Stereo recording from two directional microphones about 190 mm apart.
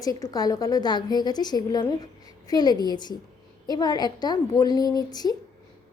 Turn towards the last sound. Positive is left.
turn(degrees=20)  # may be behind; listen again after turning